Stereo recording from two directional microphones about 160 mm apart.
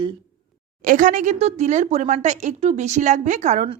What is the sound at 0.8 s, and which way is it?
A woman's voice, 55° right (ahead or behind).